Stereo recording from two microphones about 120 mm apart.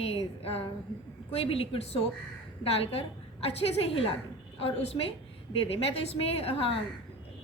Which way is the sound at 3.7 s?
55° left (ahead or behind).